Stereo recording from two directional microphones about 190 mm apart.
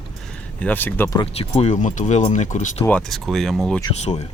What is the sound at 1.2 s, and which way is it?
Speech, 30° left (ahead or behind).